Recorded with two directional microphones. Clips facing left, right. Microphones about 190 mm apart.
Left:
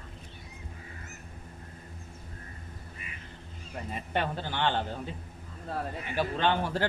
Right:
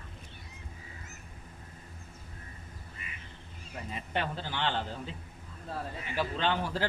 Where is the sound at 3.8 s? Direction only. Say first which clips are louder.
Left 3 dB; 55° left (ahead or behind).